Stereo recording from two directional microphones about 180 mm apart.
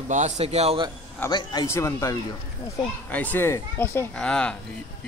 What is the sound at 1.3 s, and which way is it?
Speech, 25° left (ahead or behind).